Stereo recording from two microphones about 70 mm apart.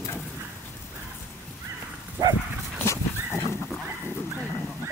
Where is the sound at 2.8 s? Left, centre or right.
Left.